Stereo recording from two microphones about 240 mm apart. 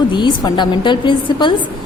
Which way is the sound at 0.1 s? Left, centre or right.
Centre.